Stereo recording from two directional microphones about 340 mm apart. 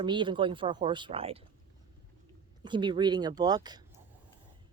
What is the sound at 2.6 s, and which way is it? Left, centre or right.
Speech, centre.